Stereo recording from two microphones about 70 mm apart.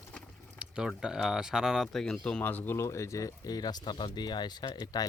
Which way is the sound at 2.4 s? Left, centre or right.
Left.